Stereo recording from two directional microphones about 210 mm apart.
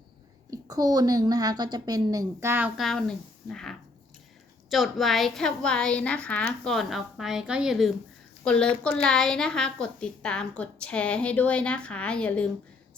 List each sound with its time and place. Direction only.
0.5 s a woman's voice: 15° right (ahead or behind); by 12.5 s 5° left (ahead or behind)